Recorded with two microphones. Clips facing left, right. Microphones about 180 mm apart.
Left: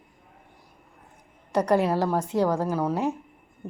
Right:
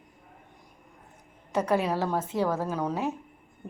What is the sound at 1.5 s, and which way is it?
Speech, 15° left (ahead or behind).